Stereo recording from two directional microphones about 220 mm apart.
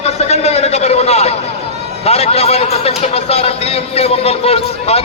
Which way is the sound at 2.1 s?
30° left (ahead or behind).